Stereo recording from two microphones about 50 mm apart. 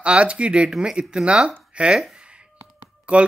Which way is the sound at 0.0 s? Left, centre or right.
Right.